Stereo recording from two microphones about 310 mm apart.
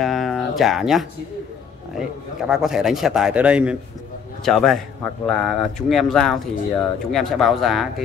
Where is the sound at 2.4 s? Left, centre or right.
Centre.